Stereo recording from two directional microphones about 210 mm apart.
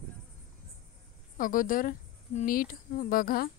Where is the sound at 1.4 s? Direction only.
40° left (ahead or behind).